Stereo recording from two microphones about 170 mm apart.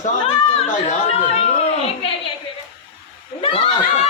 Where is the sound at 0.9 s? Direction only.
40° left (ahead or behind).